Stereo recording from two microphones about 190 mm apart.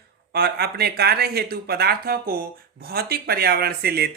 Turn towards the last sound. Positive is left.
turn(degrees=-55)  # may be behind; listen again after turning